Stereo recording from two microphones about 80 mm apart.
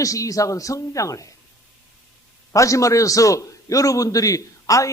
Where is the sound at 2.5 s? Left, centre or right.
Left.